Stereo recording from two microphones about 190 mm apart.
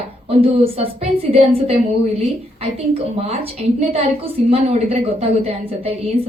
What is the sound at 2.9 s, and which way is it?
A woman's voice, 30° right (ahead or behind).